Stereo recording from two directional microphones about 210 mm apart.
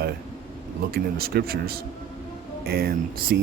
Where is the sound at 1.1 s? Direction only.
45° right (ahead or behind).